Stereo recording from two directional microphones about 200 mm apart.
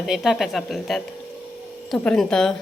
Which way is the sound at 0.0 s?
Centre (ahead or behind).